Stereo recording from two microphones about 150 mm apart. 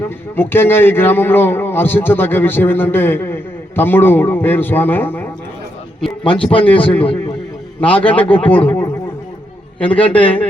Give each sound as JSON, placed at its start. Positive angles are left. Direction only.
{"t": 0.3, "sound": "a man's voice", "side_deg": 15}
{"t": 6.2, "sound": "speech", "side_deg": 35}
{"t": 6.7, "sound": "a man's voice", "side_deg": 10}
{"t": 7.0, "sound": "a man's voice", "side_deg": 35}
{"t": 7.8, "sound": "a man's voice", "side_deg": 10}
{"t": 9.8, "sound": "a man's voice", "side_deg": 10}